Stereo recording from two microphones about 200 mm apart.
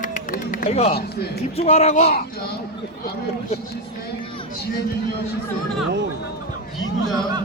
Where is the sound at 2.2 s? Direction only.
50° left (ahead or behind).